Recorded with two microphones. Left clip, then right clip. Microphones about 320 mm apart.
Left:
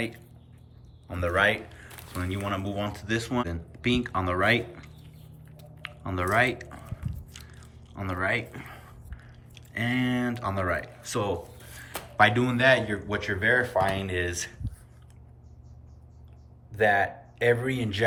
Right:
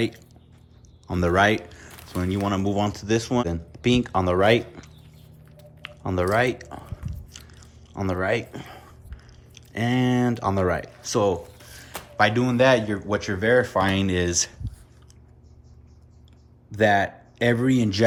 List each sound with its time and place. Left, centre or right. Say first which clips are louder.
1.1 s speech: right 4 dB; centre
5.5 s chewing: right 1 dB; centre
9.6 s speech: right 4 dB; centre
16.7 s speech: right 3 dB; centre